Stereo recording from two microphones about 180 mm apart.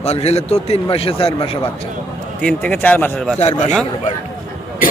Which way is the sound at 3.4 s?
40° left (ahead or behind).